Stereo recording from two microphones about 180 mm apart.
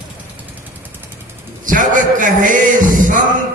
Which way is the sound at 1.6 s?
45° right (ahead or behind).